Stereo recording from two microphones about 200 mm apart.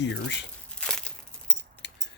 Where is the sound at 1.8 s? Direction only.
60° left (ahead or behind).